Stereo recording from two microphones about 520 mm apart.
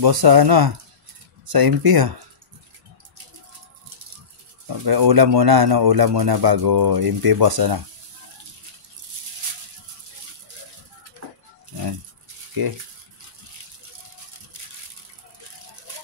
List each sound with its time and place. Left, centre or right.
0.0 s speech: right
4.6 s speech: right
12.6 s speech: right